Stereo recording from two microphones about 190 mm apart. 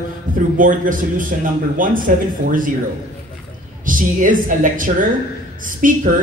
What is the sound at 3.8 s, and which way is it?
Speech, 45° right (ahead or behind).